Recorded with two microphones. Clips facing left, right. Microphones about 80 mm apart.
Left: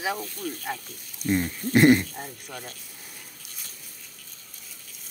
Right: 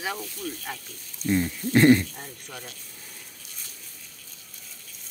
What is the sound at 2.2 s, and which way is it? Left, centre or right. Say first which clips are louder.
Speech: left 3 dB; centre.